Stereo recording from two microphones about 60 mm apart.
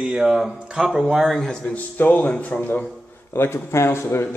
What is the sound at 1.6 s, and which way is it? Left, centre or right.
Speech, left.